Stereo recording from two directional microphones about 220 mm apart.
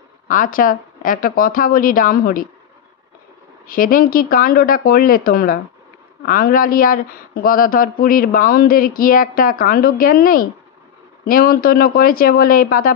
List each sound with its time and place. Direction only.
0.3 s speech: 40° left (ahead or behind)
3.6 s speech: 40° left (ahead or behind)